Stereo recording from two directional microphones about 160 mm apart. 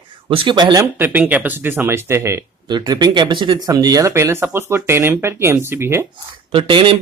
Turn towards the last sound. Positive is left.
turn(degrees=-35)  # may be behind; listen again after turning